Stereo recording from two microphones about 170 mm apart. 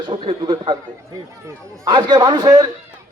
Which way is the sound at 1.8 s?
25° right (ahead or behind).